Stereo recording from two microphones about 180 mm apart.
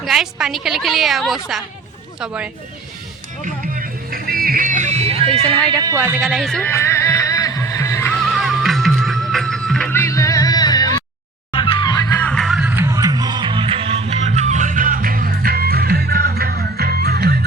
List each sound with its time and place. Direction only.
0.0 s a woman's voice: centre (ahead or behind)
3.4 s music: 50° right (ahead or behind); by 5.5 s 35° right (ahead or behind)
5.7 s speech: 20° right (ahead or behind)
6.2 s a sound: centre (ahead or behind)
8.2 s music: centre (ahead or behind)
9.9 s music: 15° left (ahead or behind)
12.2 s music: 5° left (ahead or behind); by 17.3 s 60° right (ahead or behind)